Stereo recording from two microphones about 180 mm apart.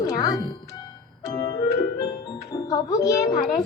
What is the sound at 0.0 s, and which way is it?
Music, 20° left (ahead or behind).